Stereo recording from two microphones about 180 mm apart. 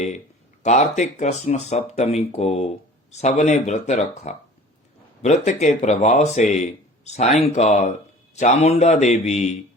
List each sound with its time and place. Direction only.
0.6 s speech: 40° left (ahead or behind)